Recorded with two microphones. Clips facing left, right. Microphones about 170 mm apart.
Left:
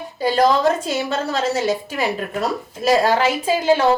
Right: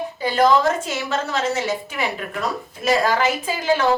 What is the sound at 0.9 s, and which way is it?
A woman's voice, 35° left (ahead or behind).